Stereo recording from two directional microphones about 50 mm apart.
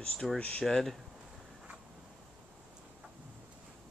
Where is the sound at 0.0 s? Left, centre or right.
Centre.